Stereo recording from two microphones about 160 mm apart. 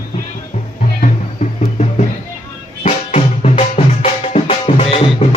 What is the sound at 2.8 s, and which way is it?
Music, 45° left (ahead or behind).